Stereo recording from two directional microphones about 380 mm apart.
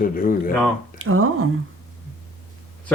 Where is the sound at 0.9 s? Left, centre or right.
Right.